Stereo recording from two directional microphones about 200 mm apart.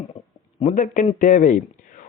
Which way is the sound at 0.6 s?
40° left (ahead or behind).